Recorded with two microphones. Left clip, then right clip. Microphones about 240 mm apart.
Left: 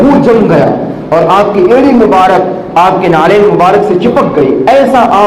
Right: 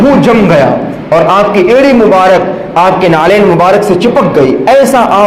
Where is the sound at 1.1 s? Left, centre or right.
Right.